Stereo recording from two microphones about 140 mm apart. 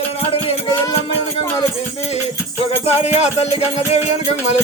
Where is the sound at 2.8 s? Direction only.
50° left (ahead or behind).